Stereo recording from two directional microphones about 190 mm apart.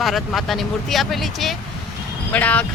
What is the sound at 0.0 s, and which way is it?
Speech, centre (ahead or behind).